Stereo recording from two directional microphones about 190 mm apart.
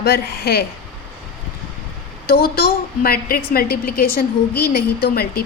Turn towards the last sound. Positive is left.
turn(degrees=55)  # may be behind; listen again after turning